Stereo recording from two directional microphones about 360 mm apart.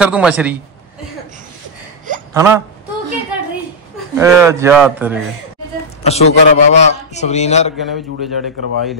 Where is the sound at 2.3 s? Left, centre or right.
Centre.